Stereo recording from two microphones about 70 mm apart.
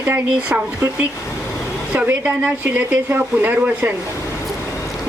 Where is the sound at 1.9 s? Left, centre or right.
Right.